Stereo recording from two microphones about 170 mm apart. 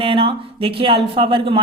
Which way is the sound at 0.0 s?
30° right (ahead or behind).